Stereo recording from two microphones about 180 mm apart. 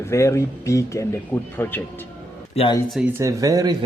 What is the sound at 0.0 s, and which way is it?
Speech, 15° left (ahead or behind).